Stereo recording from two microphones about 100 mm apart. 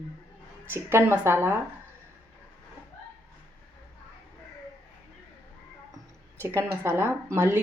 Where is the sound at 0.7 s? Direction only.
25° right (ahead or behind).